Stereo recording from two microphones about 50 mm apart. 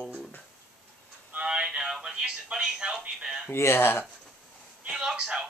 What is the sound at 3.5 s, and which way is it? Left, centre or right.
Speech, left.